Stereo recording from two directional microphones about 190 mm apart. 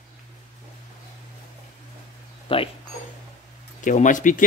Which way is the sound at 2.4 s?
30° left (ahead or behind).